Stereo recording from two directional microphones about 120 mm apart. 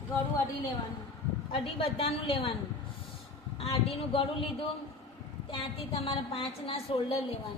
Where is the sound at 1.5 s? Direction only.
50° left (ahead or behind).